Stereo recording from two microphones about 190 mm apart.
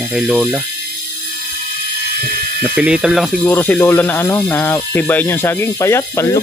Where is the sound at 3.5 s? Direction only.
10° left (ahead or behind).